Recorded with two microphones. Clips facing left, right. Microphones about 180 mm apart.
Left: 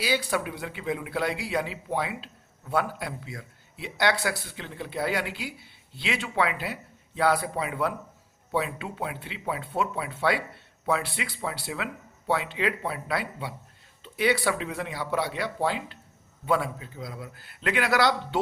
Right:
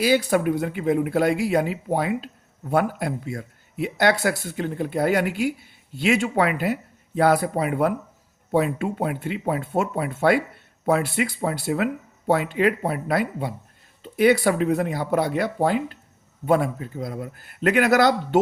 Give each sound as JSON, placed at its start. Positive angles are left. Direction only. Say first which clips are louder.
{"t": 0.0, "sound": "speech", "louder": "right 8 dB", "side_deg": -45}